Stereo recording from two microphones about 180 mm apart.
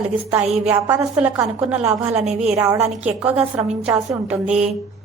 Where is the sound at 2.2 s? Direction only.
35° right (ahead or behind).